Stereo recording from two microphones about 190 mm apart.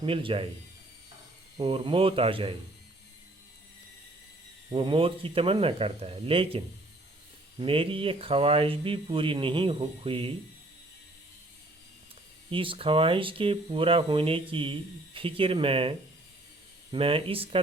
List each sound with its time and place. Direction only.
0.0 s speech: 25° right (ahead or behind)
1.5 s speech: 30° right (ahead or behind)
4.7 s speech: 30° right (ahead or behind)
7.6 s speech: 30° right (ahead or behind)
12.5 s speech: 30° right (ahead or behind)